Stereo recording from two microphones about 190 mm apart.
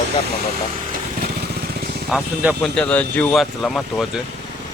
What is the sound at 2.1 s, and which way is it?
Speech, centre (ahead or behind).